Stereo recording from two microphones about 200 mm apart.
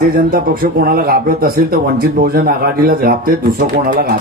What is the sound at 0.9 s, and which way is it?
Speech, 50° right (ahead or behind).